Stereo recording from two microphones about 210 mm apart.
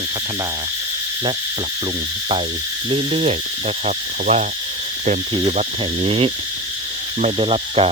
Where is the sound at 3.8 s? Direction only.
30° right (ahead or behind).